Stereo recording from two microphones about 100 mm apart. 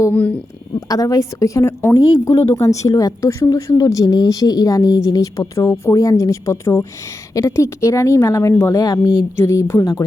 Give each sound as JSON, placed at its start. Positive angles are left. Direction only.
{"t": 0.1, "sound": "speech", "side_deg": 15}
{"t": 0.9, "sound": "speech", "side_deg": 35}